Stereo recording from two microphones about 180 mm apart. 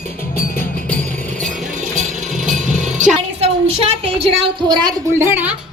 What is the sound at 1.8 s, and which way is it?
Vehicle, 45° right (ahead or behind).